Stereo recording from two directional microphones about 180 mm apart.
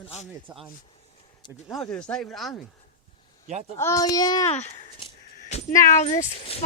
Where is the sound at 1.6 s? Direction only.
5° left (ahead or behind).